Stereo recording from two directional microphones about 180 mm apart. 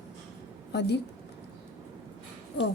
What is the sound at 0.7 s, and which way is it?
Speech, 70° left (ahead or behind).